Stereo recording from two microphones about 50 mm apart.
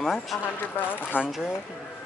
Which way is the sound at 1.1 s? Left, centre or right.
Left.